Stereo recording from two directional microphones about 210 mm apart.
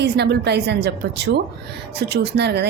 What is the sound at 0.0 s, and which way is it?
A woman's voice, 50° right (ahead or behind).